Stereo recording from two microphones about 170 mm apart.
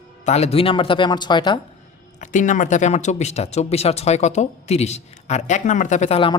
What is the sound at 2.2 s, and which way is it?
Speech, 45° left (ahead or behind).